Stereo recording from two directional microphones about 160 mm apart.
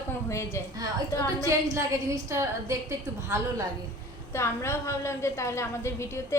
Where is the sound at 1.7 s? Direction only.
20° right (ahead or behind).